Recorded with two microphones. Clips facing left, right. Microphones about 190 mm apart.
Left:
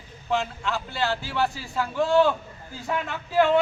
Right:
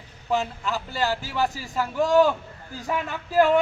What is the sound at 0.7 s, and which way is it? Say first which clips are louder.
Speech: right 1 dB; 40° right (ahead or behind).